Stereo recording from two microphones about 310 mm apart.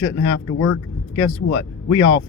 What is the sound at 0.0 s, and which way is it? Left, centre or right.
Speech, left.